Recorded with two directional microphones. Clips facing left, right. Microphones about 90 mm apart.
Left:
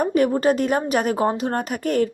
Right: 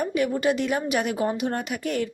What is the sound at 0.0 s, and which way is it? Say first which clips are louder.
A woman's voice: left 5 dB; 45° left (ahead or behind).